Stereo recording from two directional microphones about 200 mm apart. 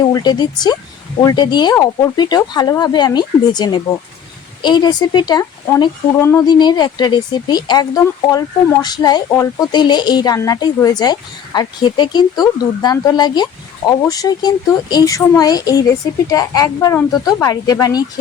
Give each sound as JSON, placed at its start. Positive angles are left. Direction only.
{"t": 0.1, "sound": "speech", "side_deg": 20}